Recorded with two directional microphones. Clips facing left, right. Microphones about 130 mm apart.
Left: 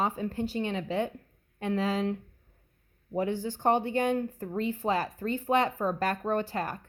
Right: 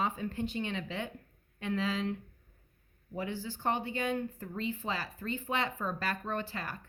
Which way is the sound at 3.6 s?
50° left (ahead or behind).